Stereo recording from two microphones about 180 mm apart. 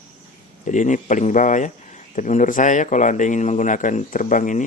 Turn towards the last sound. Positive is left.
turn(degrees=45)  # may be behind; listen again after turning